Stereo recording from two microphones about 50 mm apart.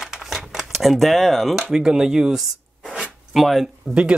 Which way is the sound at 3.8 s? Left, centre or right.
Centre.